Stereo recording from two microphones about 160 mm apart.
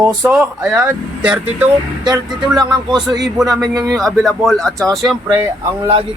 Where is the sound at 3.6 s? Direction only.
20° right (ahead or behind).